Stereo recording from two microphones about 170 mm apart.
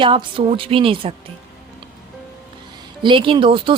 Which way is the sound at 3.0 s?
30° right (ahead or behind).